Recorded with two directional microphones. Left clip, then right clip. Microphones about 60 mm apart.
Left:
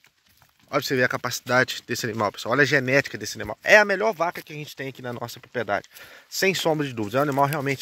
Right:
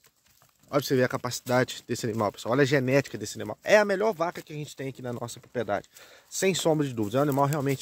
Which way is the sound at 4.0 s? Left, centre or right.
Right.